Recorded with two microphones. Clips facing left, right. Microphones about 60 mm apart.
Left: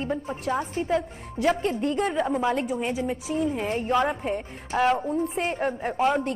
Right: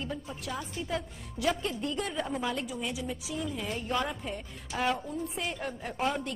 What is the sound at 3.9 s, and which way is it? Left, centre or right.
Speech, left.